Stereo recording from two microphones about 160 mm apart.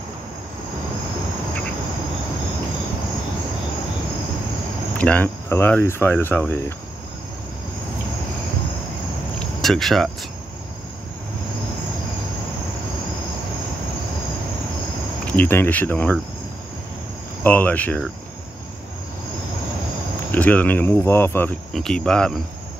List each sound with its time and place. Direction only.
4.9 s cricket: 10° left (ahead or behind)
6.0 s speech: 15° left (ahead or behind)
9.4 s a sound: centre (ahead or behind)
15.2 s speech: 10° left (ahead or behind)
17.4 s speech: 10° left (ahead or behind)
20.2 s speech: 10° left (ahead or behind)
21.7 s cricket: 5° left (ahead or behind)